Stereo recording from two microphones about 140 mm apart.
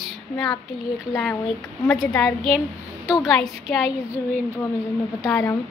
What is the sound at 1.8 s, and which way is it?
Child singing, 5° right (ahead or behind).